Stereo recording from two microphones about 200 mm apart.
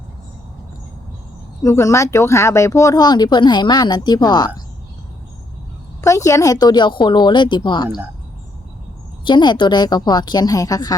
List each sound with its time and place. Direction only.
1.6 s speech: 15° left (ahead or behind)
6.0 s a woman's voice: 15° left (ahead or behind)
7.9 s speech: 10° right (ahead or behind)
9.2 s speech: 20° left (ahead or behind)